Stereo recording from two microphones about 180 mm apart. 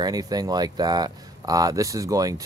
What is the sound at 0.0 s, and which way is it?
Speech, 20° right (ahead or behind).